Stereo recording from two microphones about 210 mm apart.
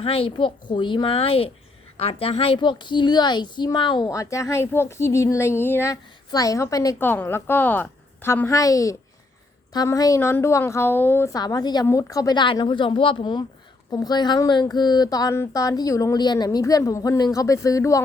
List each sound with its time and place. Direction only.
0.0 s a woman's voice: 25° left (ahead or behind)